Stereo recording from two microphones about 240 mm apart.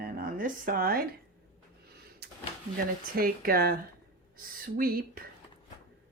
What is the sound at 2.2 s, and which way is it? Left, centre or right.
Drawer open or close, right.